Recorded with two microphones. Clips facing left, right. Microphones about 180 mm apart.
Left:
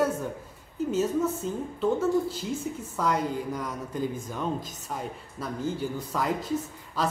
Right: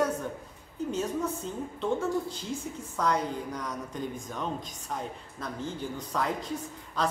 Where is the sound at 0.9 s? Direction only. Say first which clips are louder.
Left 5 dB; 5° left (ahead or behind).